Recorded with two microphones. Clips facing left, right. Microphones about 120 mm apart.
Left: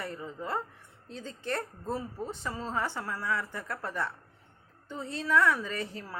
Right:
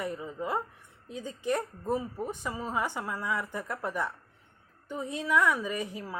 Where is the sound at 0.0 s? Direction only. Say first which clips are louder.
Right 3 dB; 15° right (ahead or behind).